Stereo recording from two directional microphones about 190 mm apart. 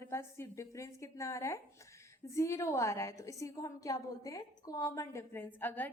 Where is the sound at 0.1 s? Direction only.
15° left (ahead or behind).